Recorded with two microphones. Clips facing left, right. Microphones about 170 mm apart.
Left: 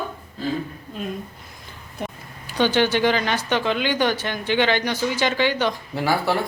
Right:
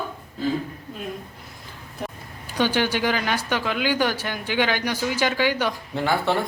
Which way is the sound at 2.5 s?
10° right (ahead or behind).